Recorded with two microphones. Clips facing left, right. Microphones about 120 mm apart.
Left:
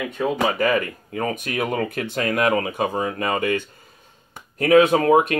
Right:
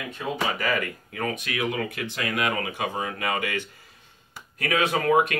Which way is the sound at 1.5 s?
50° left (ahead or behind).